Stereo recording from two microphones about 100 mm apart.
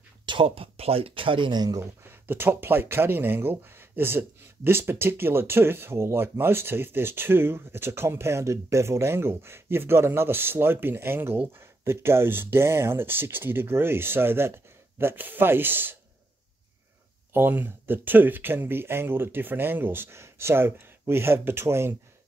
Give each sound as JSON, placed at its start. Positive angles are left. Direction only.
{"t": 0.3, "sound": "speech", "side_deg": -65}
{"t": 2.0, "sound": "speech", "side_deg": -20}
{"t": 17.3, "sound": "speech", "side_deg": -20}